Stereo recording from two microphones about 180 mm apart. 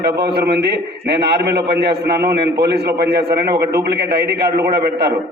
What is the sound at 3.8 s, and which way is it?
A man's voice, 65° right (ahead or behind).